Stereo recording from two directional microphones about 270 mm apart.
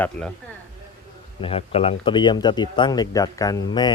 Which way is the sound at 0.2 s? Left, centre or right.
Centre.